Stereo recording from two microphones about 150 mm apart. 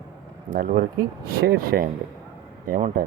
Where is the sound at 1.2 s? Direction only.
90° right.